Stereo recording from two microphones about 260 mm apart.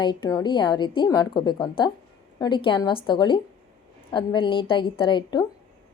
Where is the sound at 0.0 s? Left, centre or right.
Centre.